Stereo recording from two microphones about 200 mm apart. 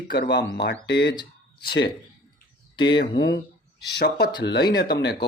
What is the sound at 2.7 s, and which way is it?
Speech, 25° left (ahead or behind).